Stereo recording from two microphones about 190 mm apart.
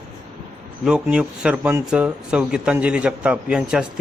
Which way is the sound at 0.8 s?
5° right (ahead or behind).